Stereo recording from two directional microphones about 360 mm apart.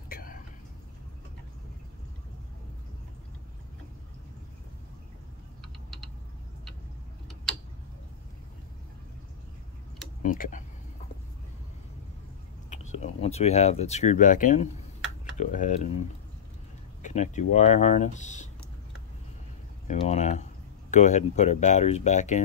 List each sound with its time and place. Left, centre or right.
0.1 s whispering: left
10.2 s speech: left
12.6 s speech: centre
17.0 s speech: centre
19.9 s speech: centre